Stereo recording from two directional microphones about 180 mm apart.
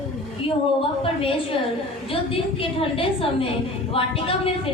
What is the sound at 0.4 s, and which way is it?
A woman's voice, 30° left (ahead or behind).